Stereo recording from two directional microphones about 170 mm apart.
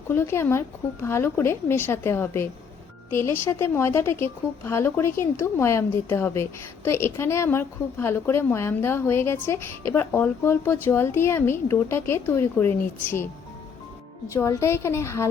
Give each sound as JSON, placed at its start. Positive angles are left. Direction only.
{"t": 0.1, "sound": "a woman's voice", "side_deg": 15}
{"t": 14.3, "sound": "a woman's voice", "side_deg": 15}